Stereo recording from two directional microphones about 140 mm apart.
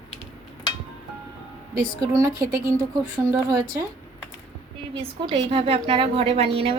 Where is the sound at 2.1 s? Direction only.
25° right (ahead or behind).